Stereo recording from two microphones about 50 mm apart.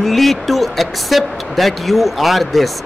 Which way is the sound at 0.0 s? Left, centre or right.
Centre.